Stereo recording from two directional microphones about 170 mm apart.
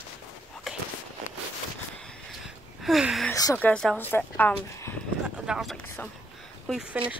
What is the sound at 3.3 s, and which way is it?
Speech, 20° left (ahead or behind).